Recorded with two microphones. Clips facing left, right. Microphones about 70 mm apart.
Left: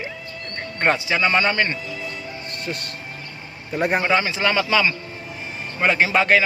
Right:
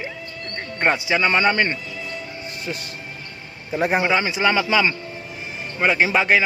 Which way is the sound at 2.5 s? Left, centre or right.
Centre.